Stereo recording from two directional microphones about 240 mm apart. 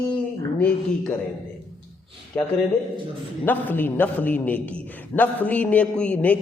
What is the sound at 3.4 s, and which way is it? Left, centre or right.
A man's voice, centre.